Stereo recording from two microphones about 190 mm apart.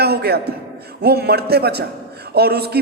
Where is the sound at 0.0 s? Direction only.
55° right (ahead or behind).